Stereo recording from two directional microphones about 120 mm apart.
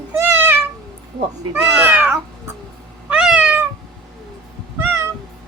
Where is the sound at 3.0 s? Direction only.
10° right (ahead or behind).